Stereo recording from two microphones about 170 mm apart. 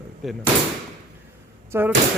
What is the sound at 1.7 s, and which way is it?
Speech, 15° right (ahead or behind).